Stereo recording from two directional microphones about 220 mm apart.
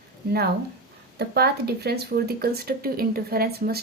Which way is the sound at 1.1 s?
45° right (ahead or behind).